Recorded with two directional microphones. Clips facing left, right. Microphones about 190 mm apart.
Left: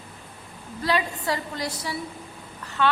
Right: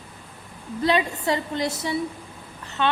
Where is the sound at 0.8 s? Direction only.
20° right (ahead or behind).